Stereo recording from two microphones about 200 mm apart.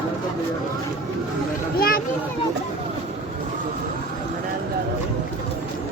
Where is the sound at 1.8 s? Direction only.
50° left (ahead or behind).